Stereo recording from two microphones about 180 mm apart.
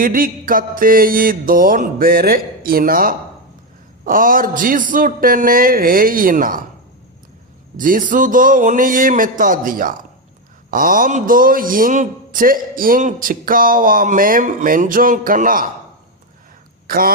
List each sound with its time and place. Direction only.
0.0 s a man's voice: 50° right (ahead or behind)
7.8 s a man's voice: 50° right (ahead or behind)
16.8 s speech: 50° right (ahead or behind)